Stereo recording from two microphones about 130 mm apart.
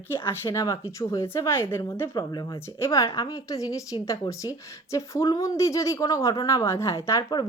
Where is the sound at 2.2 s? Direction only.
30° left (ahead or behind).